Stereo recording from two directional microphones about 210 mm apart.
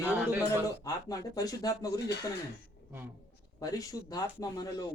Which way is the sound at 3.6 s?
15° left (ahead or behind).